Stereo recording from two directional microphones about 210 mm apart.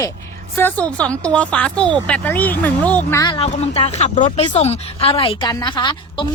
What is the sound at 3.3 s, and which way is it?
A woman's voice, 30° left (ahead or behind).